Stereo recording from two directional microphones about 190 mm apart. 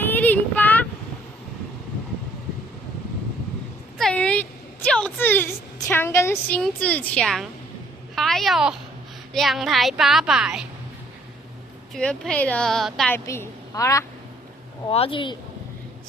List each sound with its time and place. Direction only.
0.0 s child singing: 10° left (ahead or behind)
3.9 s a sound: 5° left (ahead or behind)
5.9 s a woman's voice: 10° left (ahead or behind); by 10.7 s 5° right (ahead or behind)
11.9 s a woman's voice: 5° left (ahead or behind)
13.1 s a woman's voice: 15° left (ahead or behind)
14.8 s speech: 30° left (ahead or behind)